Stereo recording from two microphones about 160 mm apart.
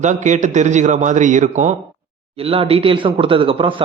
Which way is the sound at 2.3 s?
35° right (ahead or behind).